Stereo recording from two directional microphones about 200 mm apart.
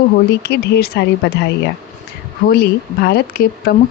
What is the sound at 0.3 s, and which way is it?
Speech, 55° left (ahead or behind).